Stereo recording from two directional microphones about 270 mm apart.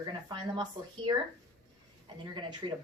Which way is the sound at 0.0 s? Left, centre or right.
Centre.